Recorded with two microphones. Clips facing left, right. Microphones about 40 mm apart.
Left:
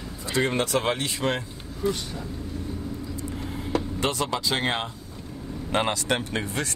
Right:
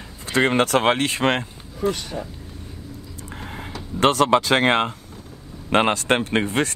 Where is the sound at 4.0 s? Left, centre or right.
Right.